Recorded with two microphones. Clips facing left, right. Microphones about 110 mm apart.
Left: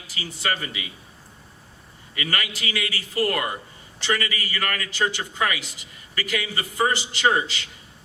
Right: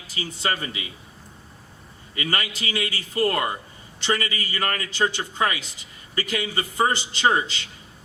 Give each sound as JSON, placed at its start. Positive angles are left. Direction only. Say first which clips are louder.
{"t": 0.1, "sound": "a man's voice", "louder": "right 1 dB", "side_deg": -25}
{"t": 2.1, "sound": "a man's voice", "louder": "right 1 dB", "side_deg": -30}